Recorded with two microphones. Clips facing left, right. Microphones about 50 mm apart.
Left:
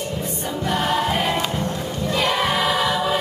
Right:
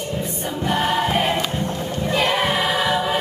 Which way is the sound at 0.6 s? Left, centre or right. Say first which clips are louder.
Right 1 dB; centre.